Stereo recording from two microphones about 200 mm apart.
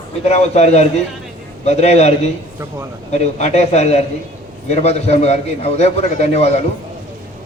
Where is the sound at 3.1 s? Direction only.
35° left (ahead or behind).